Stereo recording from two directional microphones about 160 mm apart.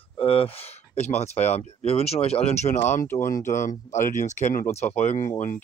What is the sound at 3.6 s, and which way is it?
Speech, 50° left (ahead or behind).